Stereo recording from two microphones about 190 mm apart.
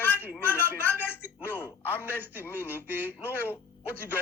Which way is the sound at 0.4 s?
10° left (ahead or behind).